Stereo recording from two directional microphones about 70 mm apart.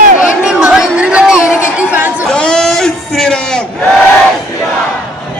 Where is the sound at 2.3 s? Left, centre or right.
Centre.